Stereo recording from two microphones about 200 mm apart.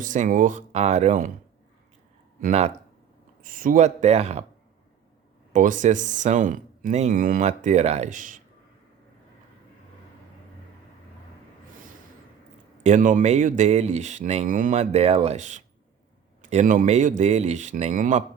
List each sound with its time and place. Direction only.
0.0 s speech: 40° right (ahead or behind)
2.4 s speech: 35° right (ahead or behind)
3.4 s speech: 45° right (ahead or behind)
5.5 s speech: 40° right (ahead or behind)
12.8 s speech: 40° right (ahead or behind)